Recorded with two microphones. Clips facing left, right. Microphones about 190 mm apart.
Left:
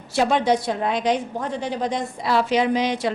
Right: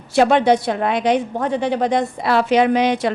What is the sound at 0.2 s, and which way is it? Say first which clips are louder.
A woman's voice: right 5 dB; 65° right (ahead or behind).